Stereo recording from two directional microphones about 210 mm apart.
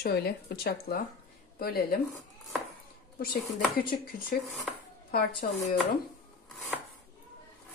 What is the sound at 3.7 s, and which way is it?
Speech, 45° left (ahead or behind).